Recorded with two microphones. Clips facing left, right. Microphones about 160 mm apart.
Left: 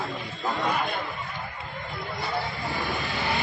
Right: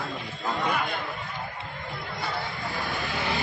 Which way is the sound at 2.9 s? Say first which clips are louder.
Left 1 dB; centre (ahead or behind).